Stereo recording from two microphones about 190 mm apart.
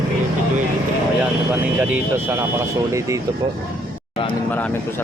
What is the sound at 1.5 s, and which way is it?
Speech, 10° right (ahead or behind).